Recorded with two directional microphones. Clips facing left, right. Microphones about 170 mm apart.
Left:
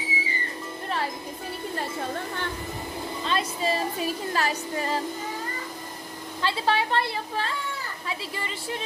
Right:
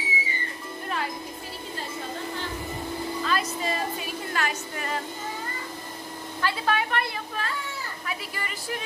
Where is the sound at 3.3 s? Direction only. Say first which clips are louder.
Left 3 dB; 30° left (ahead or behind).